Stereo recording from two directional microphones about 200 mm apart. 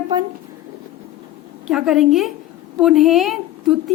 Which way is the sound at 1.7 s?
5° right (ahead or behind).